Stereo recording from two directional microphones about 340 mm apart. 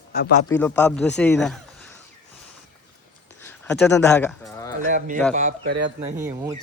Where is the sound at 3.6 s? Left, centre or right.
Centre.